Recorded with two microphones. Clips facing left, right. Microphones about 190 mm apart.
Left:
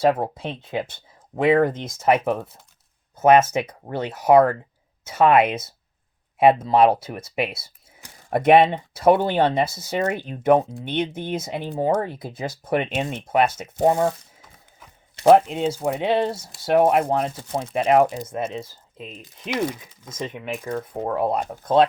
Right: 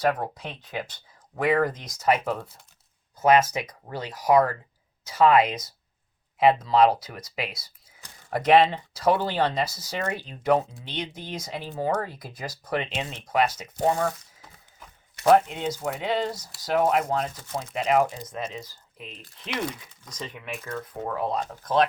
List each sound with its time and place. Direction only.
0.0 s speech: 25° left (ahead or behind)
15.2 s speech: 25° left (ahead or behind)
20.7 s speech: 35° left (ahead or behind)